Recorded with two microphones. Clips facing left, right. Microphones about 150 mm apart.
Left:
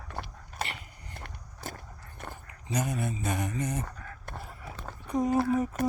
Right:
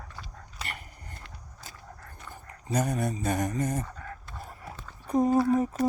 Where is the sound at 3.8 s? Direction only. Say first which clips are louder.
Right 2 dB; 60° left (ahead or behind).